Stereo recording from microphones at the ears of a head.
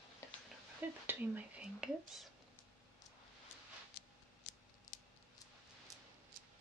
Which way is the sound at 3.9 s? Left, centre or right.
Left.